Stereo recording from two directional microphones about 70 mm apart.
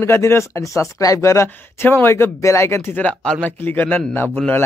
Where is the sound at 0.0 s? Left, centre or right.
Left.